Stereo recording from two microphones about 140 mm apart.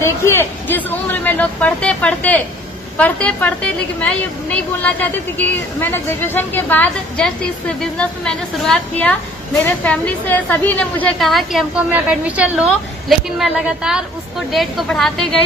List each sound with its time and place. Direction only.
0.0 s a woman's voice: 15° left (ahead or behind)
11.3 s a woman's voice: centre (ahead or behind)
11.9 s a woman's voice: 10° right (ahead or behind)